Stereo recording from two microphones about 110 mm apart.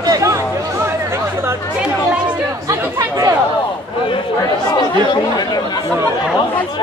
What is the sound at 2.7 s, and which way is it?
Speech, 30° right (ahead or behind).